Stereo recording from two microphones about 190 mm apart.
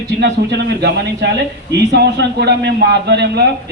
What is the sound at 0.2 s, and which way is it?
Speech, 60° right (ahead or behind).